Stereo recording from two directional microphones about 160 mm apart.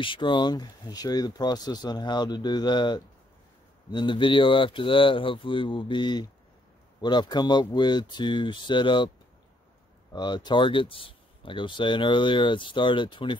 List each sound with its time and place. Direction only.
0.0 s speech: 30° left (ahead or behind)
10.1 s speech: 30° left (ahead or behind)